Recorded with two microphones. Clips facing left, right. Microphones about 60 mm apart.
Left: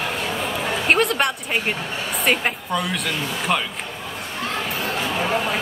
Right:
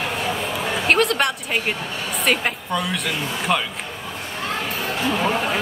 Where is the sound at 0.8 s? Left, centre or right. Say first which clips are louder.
Right 1 dB; centre.